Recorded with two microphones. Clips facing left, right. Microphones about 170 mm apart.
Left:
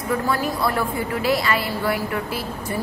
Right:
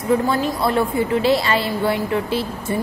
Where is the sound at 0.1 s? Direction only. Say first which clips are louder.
Right 5 dB; 25° right (ahead or behind).